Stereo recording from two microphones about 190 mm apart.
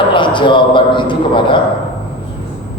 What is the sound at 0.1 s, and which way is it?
A man's voice, 25° left (ahead or behind).